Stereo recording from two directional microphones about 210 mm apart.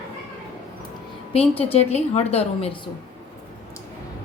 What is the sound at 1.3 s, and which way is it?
A woman's voice, 30° left (ahead or behind).